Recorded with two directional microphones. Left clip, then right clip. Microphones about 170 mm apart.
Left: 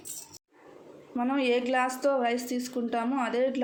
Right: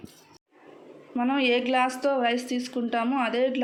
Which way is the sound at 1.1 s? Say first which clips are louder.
Right 3 dB; 5° left (ahead or behind).